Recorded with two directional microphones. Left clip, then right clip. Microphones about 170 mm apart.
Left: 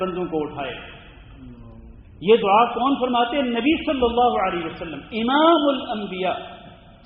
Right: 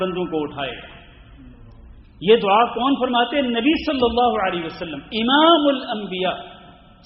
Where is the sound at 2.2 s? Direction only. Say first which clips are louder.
Right 1 dB; 30° right (ahead or behind).